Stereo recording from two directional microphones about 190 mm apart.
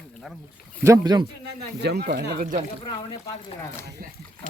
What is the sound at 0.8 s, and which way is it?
Speech, 20° right (ahead or behind).